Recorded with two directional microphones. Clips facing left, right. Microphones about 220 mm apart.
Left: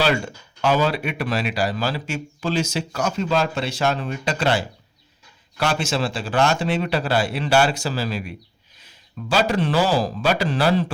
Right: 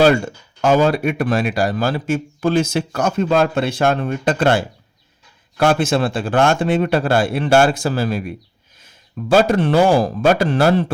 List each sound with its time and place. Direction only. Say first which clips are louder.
0.0 s speech: right 8 dB; 50° right (ahead or behind)